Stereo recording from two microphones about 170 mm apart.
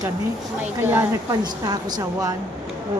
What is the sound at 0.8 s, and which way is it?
Speech, 10° right (ahead or behind).